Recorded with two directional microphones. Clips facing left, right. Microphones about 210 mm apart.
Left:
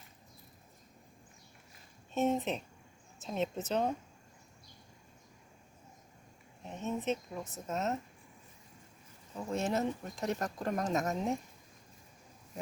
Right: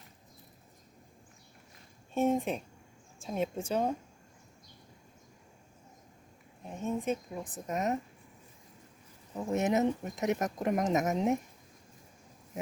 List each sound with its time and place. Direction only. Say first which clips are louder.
2.1 s a woman's voice: right 2 dB; 10° right (ahead or behind)
6.7 s speech: right 2 dB; 10° right (ahead or behind)
9.3 s speech: right 4 dB; 20° right (ahead or behind)